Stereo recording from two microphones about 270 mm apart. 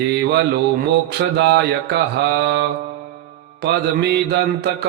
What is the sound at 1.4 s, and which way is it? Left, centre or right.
Mantra, right.